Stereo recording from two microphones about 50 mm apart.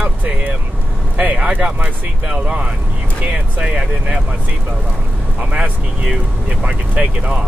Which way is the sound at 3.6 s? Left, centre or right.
Centre.